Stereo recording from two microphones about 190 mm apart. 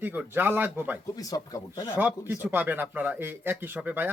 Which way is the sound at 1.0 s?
20° left (ahead or behind).